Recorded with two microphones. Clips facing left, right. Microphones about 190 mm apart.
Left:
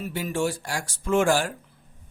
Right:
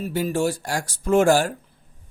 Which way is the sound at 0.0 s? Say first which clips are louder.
Right 4 dB; 35° right (ahead or behind).